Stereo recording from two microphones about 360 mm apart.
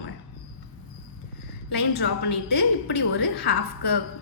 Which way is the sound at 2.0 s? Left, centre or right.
Left.